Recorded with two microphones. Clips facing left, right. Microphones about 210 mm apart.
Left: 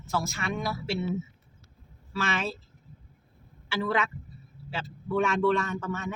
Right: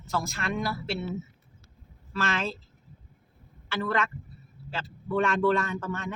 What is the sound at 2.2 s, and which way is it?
Speech, 5° left (ahead or behind).